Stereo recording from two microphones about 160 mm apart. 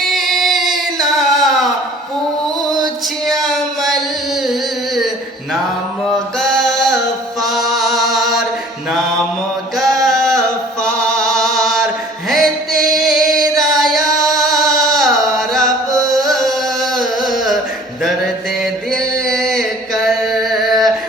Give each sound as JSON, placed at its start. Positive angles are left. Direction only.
{"t": 0.0, "sound": "music", "side_deg": 0}
{"t": 2.8, "sound": "music", "side_deg": 0}
{"t": 6.4, "sound": "a sound", "side_deg": 5}
{"t": 7.4, "sound": "chant", "side_deg": 0}
{"t": 10.0, "sound": "a sound", "side_deg": 0}
{"t": 10.8, "sound": "chant", "side_deg": 5}
{"t": 12.3, "sound": "music", "side_deg": 0}
{"t": 16.1, "sound": "carnatic music", "side_deg": 0}
{"t": 18.6, "sound": "music", "side_deg": 5}